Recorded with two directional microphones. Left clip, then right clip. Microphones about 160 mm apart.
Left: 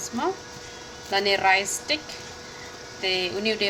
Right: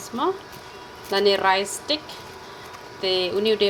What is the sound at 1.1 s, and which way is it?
Speech, 15° right (ahead or behind).